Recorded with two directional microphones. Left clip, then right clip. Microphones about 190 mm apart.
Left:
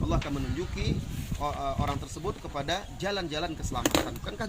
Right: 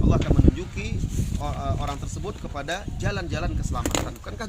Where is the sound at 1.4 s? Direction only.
20° right (ahead or behind).